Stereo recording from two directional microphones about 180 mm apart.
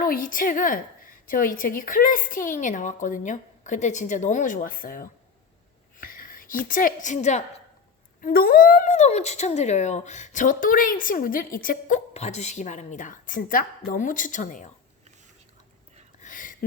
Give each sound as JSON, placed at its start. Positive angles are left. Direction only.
{"t": 0.0, "sound": "a woman's voice", "side_deg": 50}
{"t": 8.2, "sound": "a woman's voice", "side_deg": 55}
{"t": 12.1, "sound": "a woman's voice", "side_deg": 40}
{"t": 16.2, "sound": "a sound", "side_deg": 45}